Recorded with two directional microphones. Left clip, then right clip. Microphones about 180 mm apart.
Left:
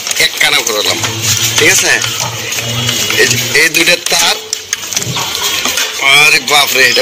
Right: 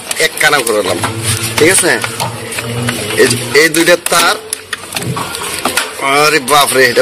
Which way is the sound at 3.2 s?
20° right (ahead or behind).